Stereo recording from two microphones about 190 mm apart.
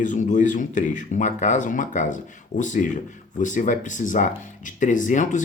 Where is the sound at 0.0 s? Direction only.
40° left (ahead or behind).